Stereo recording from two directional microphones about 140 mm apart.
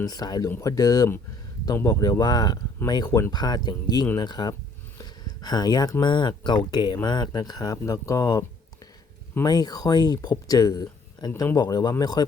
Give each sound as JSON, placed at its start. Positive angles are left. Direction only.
{"t": 0.0, "sound": "speech", "side_deg": 30}